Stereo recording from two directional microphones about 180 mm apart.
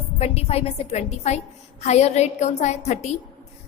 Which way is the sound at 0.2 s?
35° left (ahead or behind).